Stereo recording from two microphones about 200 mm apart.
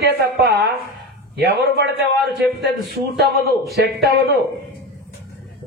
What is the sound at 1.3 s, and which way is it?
Speech, 55° right (ahead or behind).